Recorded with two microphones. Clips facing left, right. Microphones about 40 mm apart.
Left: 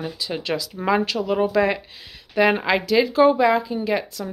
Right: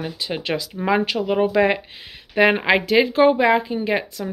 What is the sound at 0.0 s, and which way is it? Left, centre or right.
Speech, right.